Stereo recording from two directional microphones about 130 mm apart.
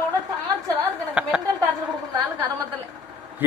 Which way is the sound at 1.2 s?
5° right (ahead or behind).